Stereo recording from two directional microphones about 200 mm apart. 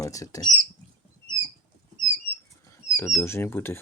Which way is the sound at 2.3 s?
10° left (ahead or behind).